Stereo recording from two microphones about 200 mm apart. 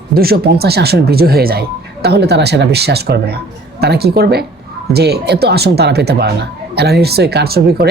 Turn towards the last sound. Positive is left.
turn(degrees=-55)  # may be behind; listen again after turning